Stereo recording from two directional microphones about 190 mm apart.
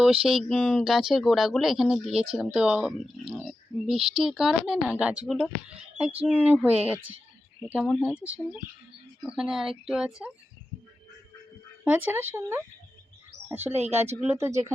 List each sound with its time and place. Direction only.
0.0 s speech: 5° right (ahead or behind)
11.9 s speech: 10° right (ahead or behind)
13.7 s speech: 35° right (ahead or behind)
14.2 s speech: 15° right (ahead or behind)